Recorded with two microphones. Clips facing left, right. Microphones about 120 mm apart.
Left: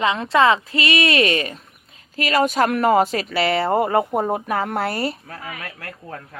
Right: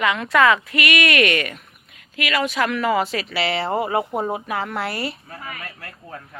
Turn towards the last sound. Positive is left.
turn(degrees=65)  # may be behind; listen again after turning